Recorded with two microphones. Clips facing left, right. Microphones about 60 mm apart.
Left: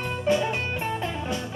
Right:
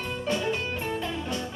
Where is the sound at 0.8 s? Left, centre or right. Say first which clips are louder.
Left 2 dB; left.